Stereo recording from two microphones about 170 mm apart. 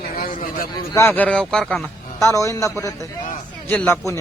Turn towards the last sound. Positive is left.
turn(degrees=10)  # may be behind; listen again after turning